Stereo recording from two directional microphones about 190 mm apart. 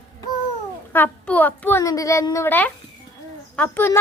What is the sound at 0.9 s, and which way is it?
A child's voice, 10° left (ahead or behind).